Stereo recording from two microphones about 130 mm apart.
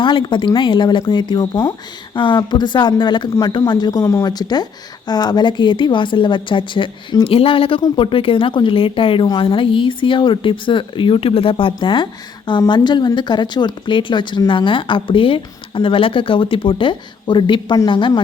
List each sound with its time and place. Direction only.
0.0 s speech: 40° left (ahead or behind)